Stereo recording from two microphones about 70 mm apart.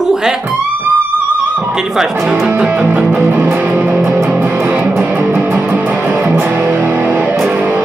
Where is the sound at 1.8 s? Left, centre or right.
Centre.